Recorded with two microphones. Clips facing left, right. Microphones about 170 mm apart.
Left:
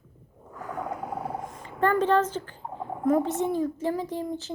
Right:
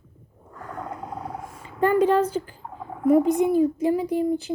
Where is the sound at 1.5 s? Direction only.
10° right (ahead or behind).